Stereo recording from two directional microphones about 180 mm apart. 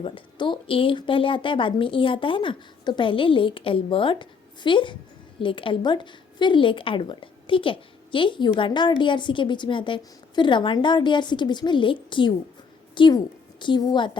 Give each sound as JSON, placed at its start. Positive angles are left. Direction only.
{"t": 0.0, "sound": "a woman's voice", "side_deg": 30}